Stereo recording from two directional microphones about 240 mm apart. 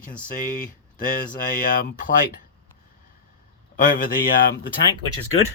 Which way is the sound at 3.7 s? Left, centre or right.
Left.